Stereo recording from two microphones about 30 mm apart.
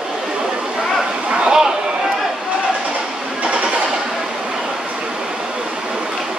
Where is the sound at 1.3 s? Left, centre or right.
Right.